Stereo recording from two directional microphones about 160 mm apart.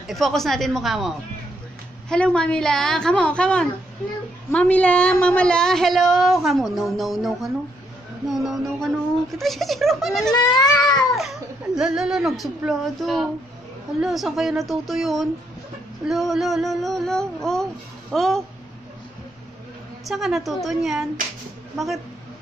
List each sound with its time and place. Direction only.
0.0 s a woman's voice: centre (ahead or behind)
10.3 s goat: 25° left (ahead or behind)
11.1 s a woman's voice: centre (ahead or behind)
20.1 s a woman's voice: centre (ahead or behind)